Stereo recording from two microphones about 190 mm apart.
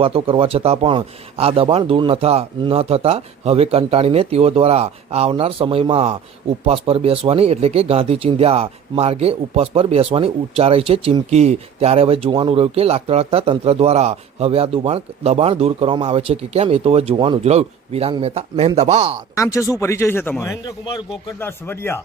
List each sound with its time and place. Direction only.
0.0 s speech: 30° right (ahead or behind)
19.4 s a man's voice: 15° left (ahead or behind)